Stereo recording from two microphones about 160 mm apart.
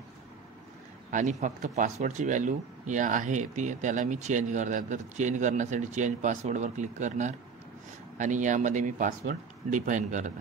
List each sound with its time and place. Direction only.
1.1 s speech: 50° right (ahead or behind)